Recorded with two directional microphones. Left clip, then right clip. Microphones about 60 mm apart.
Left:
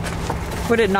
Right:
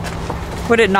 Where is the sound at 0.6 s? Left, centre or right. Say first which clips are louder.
Right 5 dB; right.